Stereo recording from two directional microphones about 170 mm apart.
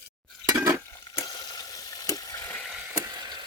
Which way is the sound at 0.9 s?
20° left (ahead or behind).